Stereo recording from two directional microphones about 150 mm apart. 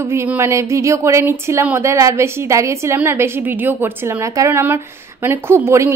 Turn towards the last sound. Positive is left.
turn(degrees=-15)  # may be behind; listen again after turning